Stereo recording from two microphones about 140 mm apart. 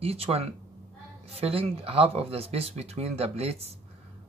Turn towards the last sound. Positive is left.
turn(degrees=-45)  # may be behind; listen again after turning